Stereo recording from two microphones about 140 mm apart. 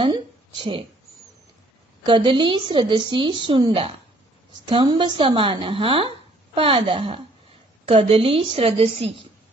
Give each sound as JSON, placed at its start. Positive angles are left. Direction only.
{"t": 0.0, "sound": "speech", "side_deg": -40}
{"t": 2.0, "sound": "a woman's voice", "side_deg": -40}